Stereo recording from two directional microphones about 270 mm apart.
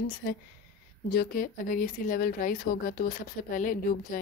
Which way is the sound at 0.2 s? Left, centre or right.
Left.